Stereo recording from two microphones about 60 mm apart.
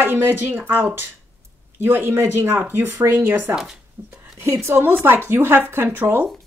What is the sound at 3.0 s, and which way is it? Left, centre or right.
A woman's voice, right.